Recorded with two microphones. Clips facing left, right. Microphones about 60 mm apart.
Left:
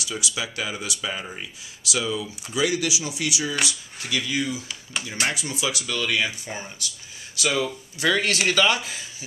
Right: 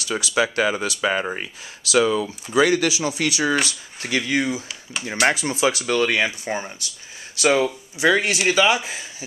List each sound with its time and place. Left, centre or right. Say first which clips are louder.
0.0 s speech: right 5 dB; right
0.3 s speech: right 13 dB; right
8.0 s speech: right 4 dB; centre